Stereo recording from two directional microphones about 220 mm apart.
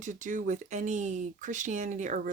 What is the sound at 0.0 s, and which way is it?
Speech, 35° right (ahead or behind).